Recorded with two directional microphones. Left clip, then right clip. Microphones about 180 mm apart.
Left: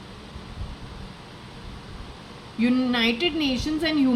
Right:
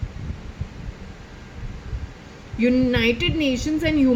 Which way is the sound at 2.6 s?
20° right (ahead or behind).